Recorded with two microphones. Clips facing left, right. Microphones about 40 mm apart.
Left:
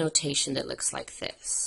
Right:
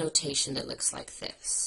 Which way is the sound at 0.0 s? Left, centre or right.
Left.